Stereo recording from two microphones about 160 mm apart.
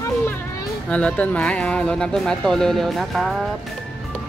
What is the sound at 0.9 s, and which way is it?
Speech, 5° left (ahead or behind).